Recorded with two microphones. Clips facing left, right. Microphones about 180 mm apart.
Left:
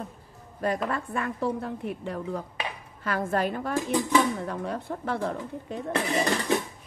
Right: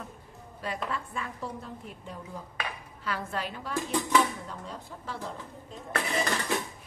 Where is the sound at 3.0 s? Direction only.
50° left (ahead or behind).